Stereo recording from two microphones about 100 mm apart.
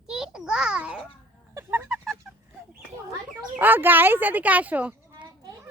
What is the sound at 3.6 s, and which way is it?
A child's voice, 20° right (ahead or behind).